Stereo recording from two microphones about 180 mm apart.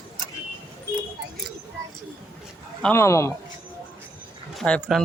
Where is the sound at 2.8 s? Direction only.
15° left (ahead or behind).